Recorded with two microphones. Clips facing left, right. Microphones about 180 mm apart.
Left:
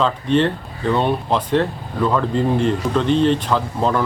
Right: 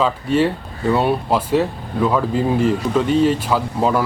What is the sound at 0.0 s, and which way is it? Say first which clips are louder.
Speech: even; 5° right (ahead or behind).